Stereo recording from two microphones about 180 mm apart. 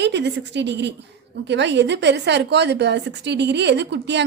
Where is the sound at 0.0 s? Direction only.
70° right (ahead or behind).